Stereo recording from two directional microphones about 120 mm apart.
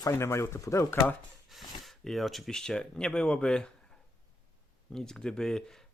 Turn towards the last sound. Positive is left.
turn(degrees=5)  # may be behind; listen again after turning